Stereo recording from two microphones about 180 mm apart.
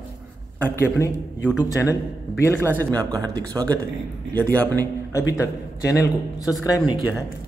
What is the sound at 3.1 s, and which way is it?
Speech, 20° right (ahead or behind).